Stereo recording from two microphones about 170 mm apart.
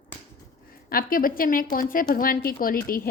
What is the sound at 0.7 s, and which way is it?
A woman's voice, 60° left (ahead or behind).